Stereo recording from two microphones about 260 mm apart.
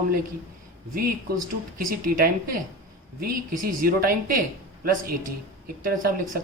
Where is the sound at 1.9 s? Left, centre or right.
Right.